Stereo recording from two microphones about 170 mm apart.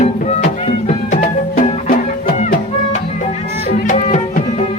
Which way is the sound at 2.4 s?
45° left (ahead or behind).